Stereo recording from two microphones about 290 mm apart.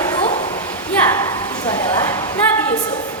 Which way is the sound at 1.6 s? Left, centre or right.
Centre.